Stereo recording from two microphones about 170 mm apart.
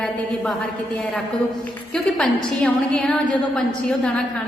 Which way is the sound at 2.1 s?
5° left (ahead or behind).